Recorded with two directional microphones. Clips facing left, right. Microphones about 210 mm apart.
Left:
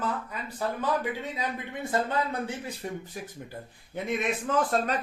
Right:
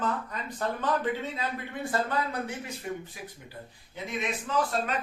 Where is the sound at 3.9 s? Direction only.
55° left (ahead or behind).